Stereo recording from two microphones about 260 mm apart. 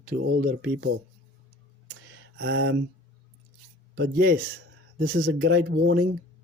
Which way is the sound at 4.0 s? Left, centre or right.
Right.